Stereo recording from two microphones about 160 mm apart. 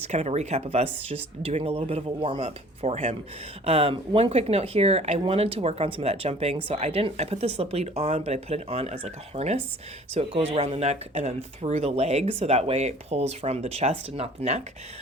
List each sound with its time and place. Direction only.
0.0 s speech: 40° right (ahead or behind)